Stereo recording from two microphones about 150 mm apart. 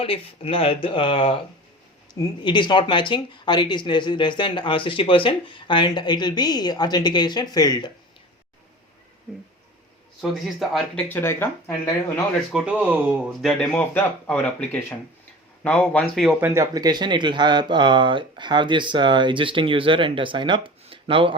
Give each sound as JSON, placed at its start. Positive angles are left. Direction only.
{"t": 0.0, "sound": "speech", "side_deg": 40}
{"t": 10.2, "sound": "speech", "side_deg": 0}
{"t": 11.1, "sound": "speech", "side_deg": 15}
{"t": 12.5, "sound": "speech", "side_deg": -10}
{"t": 16.4, "sound": "speech", "side_deg": -20}